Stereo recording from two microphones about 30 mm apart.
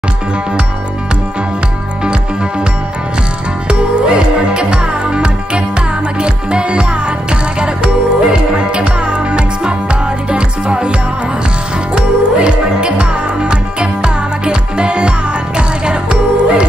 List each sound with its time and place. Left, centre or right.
3.6 s music: right